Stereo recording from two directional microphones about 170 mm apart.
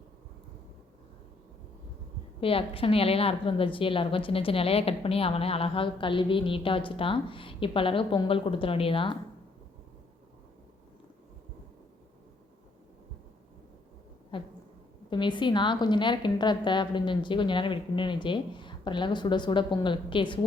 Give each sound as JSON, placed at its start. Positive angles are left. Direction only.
{"t": 2.4, "sound": "a woman's voice", "side_deg": 35}
{"t": 14.3, "sound": "a sound", "side_deg": 30}
{"t": 15.1, "sound": "a woman's voice", "side_deg": 25}